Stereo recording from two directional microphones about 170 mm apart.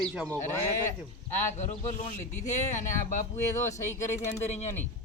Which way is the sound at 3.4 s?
15° left (ahead or behind).